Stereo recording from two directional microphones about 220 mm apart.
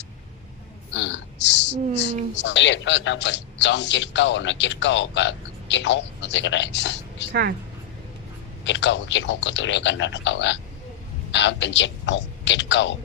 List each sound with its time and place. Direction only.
0.9 s a sound: 55° left (ahead or behind)
2.3 s a man's voice: 55° left (ahead or behind)
8.6 s a man's voice: 55° left (ahead or behind)